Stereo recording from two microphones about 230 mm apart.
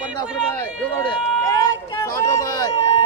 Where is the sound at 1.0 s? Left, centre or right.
Centre.